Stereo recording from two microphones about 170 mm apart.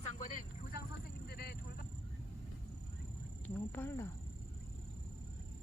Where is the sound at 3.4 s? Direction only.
10° left (ahead or behind).